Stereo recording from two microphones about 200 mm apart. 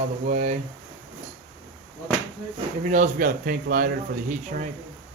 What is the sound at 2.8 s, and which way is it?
Speech, 40° right (ahead or behind).